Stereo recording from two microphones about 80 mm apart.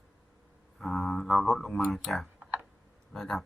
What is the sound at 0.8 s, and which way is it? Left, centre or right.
Speech, centre.